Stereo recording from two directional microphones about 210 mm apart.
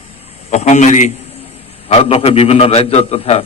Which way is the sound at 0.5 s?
35° left (ahead or behind).